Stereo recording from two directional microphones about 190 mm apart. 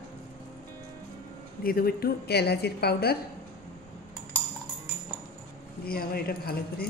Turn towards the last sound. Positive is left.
turn(degrees=50)  # may be behind; listen again after turning